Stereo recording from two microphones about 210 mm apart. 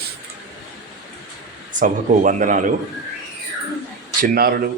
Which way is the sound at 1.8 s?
35° right (ahead or behind).